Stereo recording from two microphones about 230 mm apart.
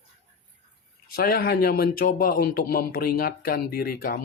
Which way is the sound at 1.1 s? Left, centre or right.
Left.